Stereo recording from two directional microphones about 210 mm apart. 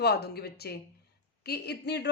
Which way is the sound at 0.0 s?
50° left (ahead or behind).